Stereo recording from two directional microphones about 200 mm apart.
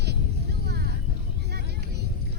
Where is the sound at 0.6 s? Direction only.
55° right (ahead or behind).